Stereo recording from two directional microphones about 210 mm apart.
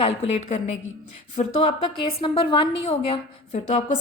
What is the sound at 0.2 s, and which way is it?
A woman's voice, 30° left (ahead or behind).